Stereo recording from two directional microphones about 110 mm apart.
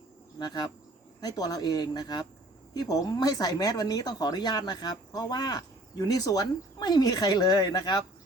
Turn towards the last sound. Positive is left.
turn(degrees=40)  # may be behind; listen again after turning